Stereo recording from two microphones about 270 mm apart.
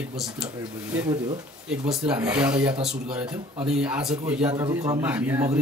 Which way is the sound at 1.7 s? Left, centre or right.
Centre.